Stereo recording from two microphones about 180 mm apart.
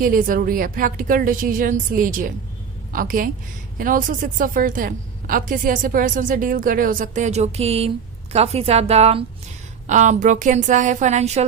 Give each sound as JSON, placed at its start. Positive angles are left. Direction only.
{"t": 0.0, "sound": "a woman's voice", "side_deg": -50}